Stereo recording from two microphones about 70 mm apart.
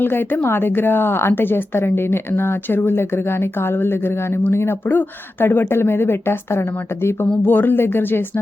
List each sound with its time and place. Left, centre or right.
0.0 s speech: left